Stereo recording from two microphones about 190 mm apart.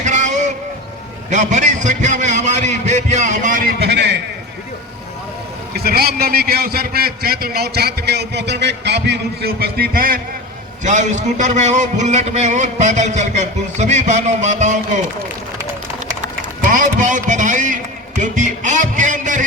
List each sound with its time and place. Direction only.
0.0 s a sound: 40° right (ahead or behind)
3.8 s a sound: 60° right (ahead or behind)
5.7 s a man's voice: 55° right (ahead or behind)
10.8 s a man's voice: 40° right (ahead or behind)
16.2 s a man's voice: 45° right (ahead or behind)
18.2 s music: 40° right (ahead or behind)